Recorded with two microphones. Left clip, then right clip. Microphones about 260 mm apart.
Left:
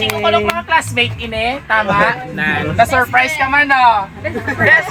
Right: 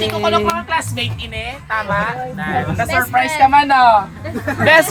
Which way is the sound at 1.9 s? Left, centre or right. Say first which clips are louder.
Left 5 dB; left.